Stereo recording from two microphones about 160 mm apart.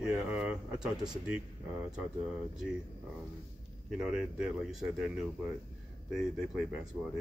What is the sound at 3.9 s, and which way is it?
Speech, 5° right (ahead or behind).